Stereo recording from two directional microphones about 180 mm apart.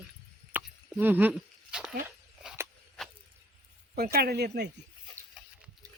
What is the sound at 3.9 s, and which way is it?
Speech, 60° right (ahead or behind).